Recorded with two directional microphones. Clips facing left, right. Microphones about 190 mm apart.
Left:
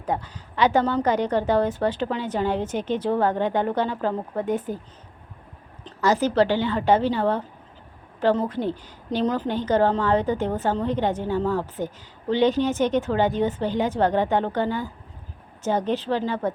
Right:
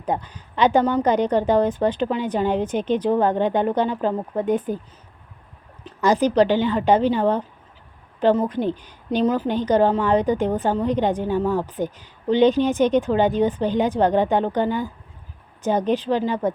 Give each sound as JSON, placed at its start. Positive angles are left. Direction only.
{"t": 0.0, "sound": "a woman's voice", "side_deg": -20}
{"t": 5.8, "sound": "a woman's voice", "side_deg": -15}